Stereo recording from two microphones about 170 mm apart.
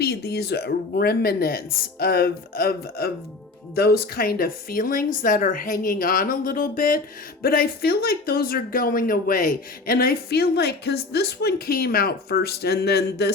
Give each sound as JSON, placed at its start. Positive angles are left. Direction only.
{"t": 0.0, "sound": "speech", "side_deg": 70}